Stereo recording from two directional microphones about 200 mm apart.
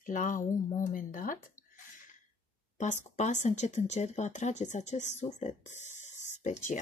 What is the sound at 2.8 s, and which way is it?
Speech, 35° left (ahead or behind).